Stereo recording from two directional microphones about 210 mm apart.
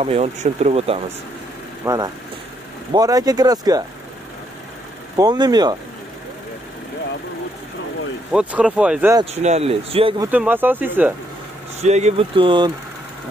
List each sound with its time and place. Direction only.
0.0 s speech: 30° right (ahead or behind)
1.8 s speech: 10° right (ahead or behind)
5.1 s speech: 20° right (ahead or behind)
8.3 s speech: 5° right (ahead or behind)
9.2 s speech: 30° right (ahead or behind)
10.3 s speech: 10° right (ahead or behind)
11.8 s speech: 30° right (ahead or behind)